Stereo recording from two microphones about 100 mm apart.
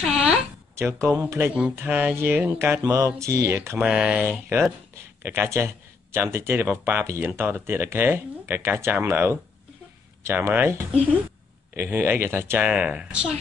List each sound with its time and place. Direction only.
0.0 s speech: 5° right (ahead or behind)
0.7 s speech: 25° right (ahead or behind)
2.8 s mantra: 35° right (ahead or behind)
3.2 s speech: 30° right (ahead or behind)
3.8 s speech: 10° right (ahead or behind)
4.2 s speech: 20° right (ahead or behind)